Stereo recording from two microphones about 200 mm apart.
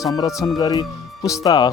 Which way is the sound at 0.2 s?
20° left (ahead or behind).